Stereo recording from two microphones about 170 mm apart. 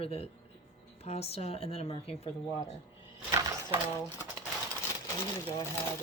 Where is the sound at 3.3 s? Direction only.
20° right (ahead or behind).